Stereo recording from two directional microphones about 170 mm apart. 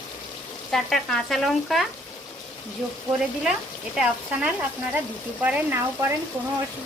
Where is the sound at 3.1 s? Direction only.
Centre (ahead or behind).